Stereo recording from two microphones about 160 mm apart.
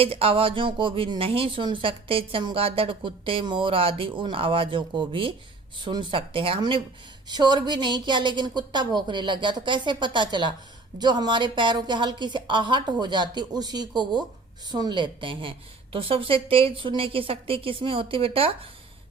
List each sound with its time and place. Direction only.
0.0 s a woman's voice: 35° right (ahead or behind)